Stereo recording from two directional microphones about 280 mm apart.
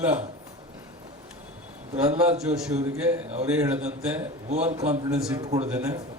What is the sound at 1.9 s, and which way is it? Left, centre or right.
Speech, right.